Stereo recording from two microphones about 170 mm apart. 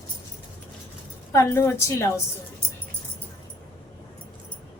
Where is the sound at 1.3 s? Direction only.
15° left (ahead or behind).